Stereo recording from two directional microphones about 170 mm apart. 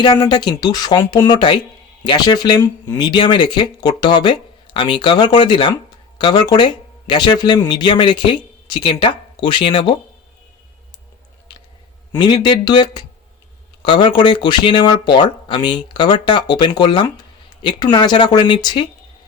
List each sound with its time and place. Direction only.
0.0 s speech: 25° left (ahead or behind)
2.6 s speech: 15° left (ahead or behind)
3.0 s speech: 25° left (ahead or behind)
12.1 s speech: 25° left (ahead or behind)